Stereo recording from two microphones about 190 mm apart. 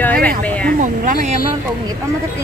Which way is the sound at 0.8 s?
45° right (ahead or behind).